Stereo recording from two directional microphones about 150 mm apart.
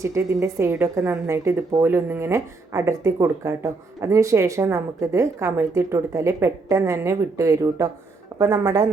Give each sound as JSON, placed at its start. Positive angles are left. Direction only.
{"t": 0.0, "sound": "speech", "side_deg": -20}